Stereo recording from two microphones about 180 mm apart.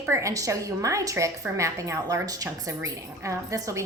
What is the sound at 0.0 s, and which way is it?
A woman's voice, 15° right (ahead or behind).